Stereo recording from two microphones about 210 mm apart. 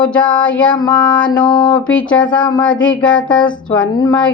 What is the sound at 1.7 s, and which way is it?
Music, 5° left (ahead or behind).